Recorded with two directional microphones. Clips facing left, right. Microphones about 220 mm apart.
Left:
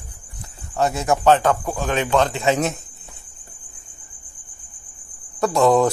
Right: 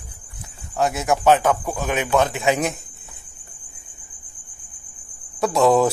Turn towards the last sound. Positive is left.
turn(degrees=0)  # may be behind; listen again after turning